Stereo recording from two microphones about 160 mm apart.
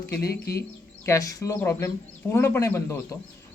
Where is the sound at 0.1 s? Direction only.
75° left (ahead or behind).